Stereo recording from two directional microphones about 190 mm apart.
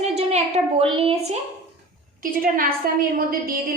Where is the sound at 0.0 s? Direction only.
35° right (ahead or behind).